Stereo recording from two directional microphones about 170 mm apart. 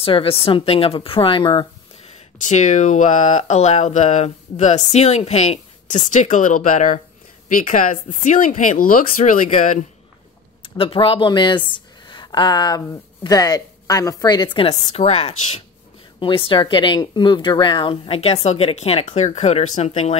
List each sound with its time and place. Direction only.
0.0 s speech: 35° left (ahead or behind)
2.3 s speech: 45° left (ahead or behind)
10.6 s speech: 35° left (ahead or behind)